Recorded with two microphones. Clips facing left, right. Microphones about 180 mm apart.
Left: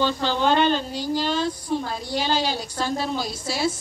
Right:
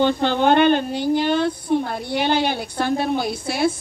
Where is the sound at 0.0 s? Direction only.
55° right (ahead or behind).